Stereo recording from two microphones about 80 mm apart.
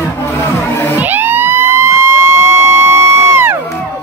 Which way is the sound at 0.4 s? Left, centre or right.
Left.